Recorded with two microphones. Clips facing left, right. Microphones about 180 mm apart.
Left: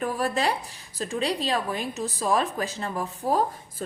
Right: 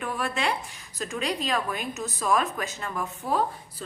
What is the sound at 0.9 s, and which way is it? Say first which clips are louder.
Speech: left 3 dB; 30° left (ahead or behind).